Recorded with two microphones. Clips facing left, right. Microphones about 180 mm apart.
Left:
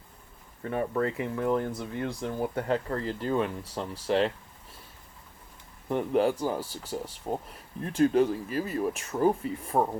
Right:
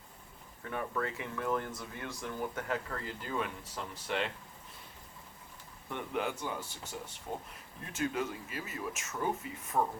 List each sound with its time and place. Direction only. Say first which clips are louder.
0.6 s speech: left 8 dB; 35° left (ahead or behind)
5.9 s speech: left 11 dB; 35° left (ahead or behind)